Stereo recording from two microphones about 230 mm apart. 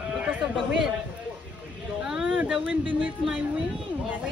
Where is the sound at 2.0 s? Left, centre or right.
Centre.